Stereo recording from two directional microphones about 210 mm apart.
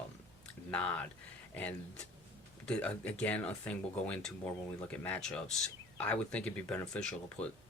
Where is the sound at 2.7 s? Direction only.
5° left (ahead or behind).